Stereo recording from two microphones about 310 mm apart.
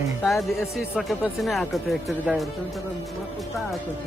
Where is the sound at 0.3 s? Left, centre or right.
Centre.